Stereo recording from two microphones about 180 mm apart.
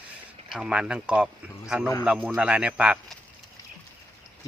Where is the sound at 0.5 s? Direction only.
5° right (ahead or behind).